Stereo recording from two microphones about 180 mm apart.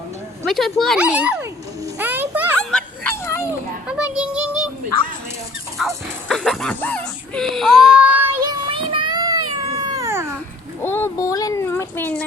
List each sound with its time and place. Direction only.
0.4 s speech: centre (ahead or behind)
2.0 s music: 10° right (ahead or behind)
2.6 s a sound: 5° left (ahead or behind)
3.8 s child singing: 5° right (ahead or behind)
5.8 s music: centre (ahead or behind)
6.2 s baby cry: 5° left (ahead or behind)
8.4 s child singing: 25° right (ahead or behind)
9.7 s cat: 20° right (ahead or behind)
10.8 s a sound: 15° left (ahead or behind)